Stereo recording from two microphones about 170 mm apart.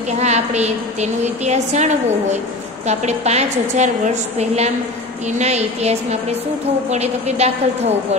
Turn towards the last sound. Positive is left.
turn(degrees=-40)  # may be behind; listen again after turning